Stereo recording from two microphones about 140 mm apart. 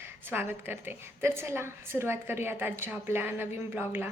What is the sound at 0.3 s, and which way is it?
A woman's voice, 15° right (ahead or behind).